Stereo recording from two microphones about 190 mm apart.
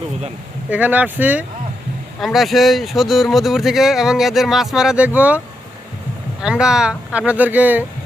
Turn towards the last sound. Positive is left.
turn(degrees=-10)  # may be behind; listen again after turning